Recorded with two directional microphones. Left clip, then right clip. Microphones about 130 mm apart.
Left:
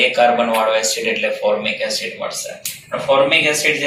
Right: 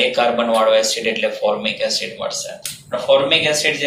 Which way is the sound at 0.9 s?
50° right (ahead or behind).